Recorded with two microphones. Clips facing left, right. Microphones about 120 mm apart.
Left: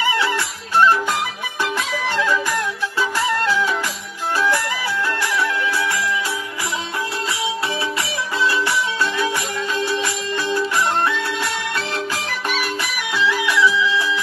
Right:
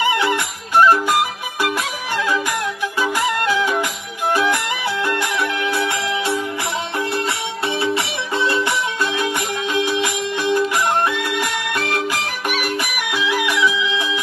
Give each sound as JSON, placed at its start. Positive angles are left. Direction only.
{"t": 0.0, "sound": "music", "side_deg": -20}
{"t": 5.7, "sound": "music", "side_deg": -25}
{"t": 7.8, "sound": "music", "side_deg": -25}